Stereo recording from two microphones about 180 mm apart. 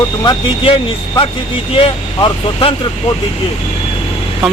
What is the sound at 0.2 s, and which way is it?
Speech, 25° left (ahead or behind).